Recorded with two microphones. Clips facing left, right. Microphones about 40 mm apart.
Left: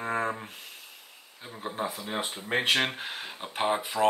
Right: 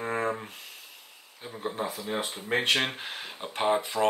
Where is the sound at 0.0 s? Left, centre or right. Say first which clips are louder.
Even; centre.